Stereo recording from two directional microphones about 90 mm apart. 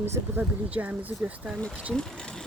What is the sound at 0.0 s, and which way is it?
Speech, 30° right (ahead or behind).